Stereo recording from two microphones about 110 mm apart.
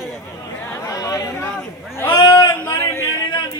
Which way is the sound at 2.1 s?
40° left (ahead or behind).